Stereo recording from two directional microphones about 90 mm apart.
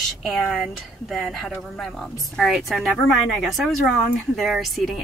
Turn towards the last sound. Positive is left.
turn(degrees=0)  # may be behind; listen again after turning